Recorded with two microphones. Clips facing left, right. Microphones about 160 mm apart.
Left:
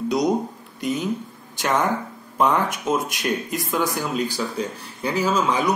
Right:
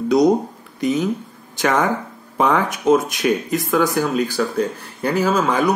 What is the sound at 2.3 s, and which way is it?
Speech, 80° right.